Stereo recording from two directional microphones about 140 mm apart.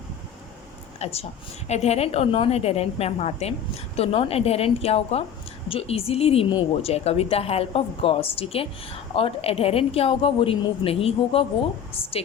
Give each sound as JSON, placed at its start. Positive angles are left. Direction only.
{"t": 0.9, "sound": "a woman's voice", "side_deg": 45}